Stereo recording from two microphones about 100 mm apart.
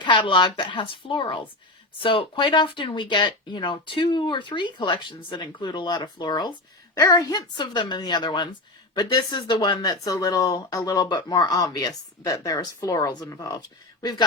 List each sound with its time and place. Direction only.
0.0 s a woman's voice: 55° left (ahead or behind)